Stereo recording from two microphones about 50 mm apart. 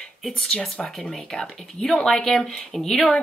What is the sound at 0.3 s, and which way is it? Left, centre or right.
Speech, centre.